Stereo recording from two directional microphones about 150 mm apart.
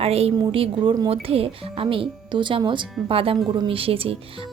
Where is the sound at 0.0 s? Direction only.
40° right (ahead or behind).